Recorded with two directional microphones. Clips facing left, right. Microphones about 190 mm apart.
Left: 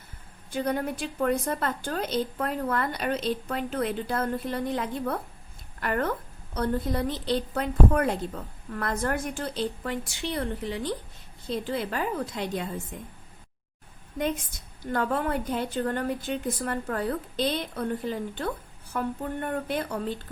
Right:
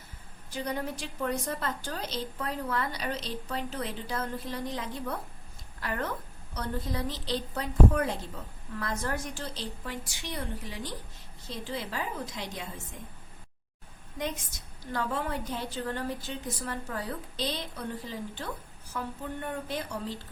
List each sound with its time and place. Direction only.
0.5 s a woman's voice: 55° left (ahead or behind)
14.2 s a woman's voice: 55° left (ahead or behind)
18.9 s a woman's voice: 55° left (ahead or behind)